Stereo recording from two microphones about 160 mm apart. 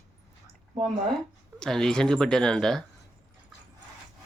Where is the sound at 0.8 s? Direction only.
5° left (ahead or behind).